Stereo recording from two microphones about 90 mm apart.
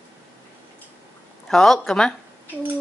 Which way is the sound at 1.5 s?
5° left (ahead or behind).